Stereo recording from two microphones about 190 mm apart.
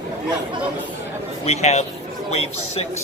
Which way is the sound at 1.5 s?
35° left (ahead or behind).